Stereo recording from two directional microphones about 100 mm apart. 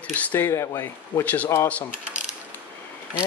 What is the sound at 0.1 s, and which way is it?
Speech, 20° left (ahead or behind).